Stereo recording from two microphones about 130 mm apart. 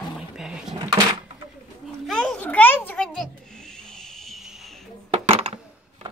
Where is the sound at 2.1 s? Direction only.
5° left (ahead or behind).